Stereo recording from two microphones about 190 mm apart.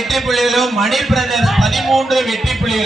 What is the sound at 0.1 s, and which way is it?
Speech, centre (ahead or behind).